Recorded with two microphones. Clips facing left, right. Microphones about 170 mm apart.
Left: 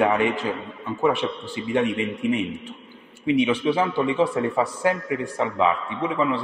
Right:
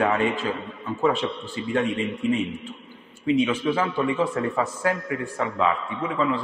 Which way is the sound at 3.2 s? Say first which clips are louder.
Left 1 dB; 15° left (ahead or behind).